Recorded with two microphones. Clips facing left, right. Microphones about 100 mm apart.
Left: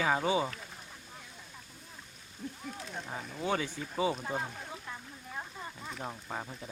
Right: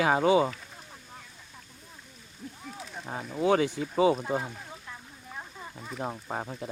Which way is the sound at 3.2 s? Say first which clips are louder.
Right 10 dB; 10° right (ahead or behind).